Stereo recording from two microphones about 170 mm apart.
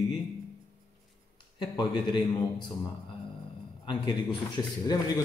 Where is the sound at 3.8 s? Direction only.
25° left (ahead or behind).